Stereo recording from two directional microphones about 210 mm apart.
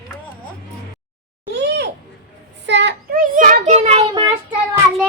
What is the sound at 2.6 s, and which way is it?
Child singing, 55° right (ahead or behind).